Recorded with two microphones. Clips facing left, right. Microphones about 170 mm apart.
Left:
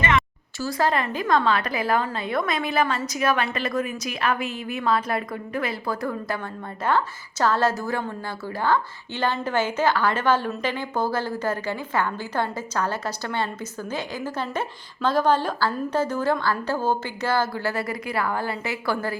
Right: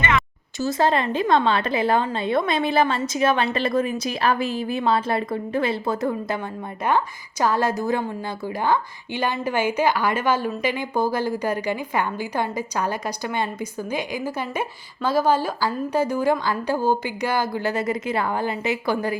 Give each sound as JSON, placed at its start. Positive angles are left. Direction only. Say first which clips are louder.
{"t": 0.6, "sound": "a woman's voice", "louder": "right 3 dB", "side_deg": -25}